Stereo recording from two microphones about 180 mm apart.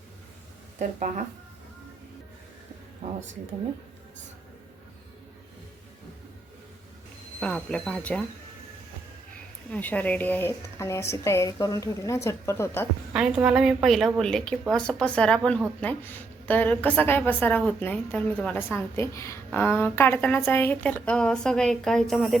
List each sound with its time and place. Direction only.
0.8 s speech: 45° right (ahead or behind)
3.0 s speech: 40° right (ahead or behind)
7.3 s a woman's voice: 5° left (ahead or behind)
9.6 s a woman's voice: 10° left (ahead or behind)
13.1 s a woman's voice: 5° right (ahead or behind)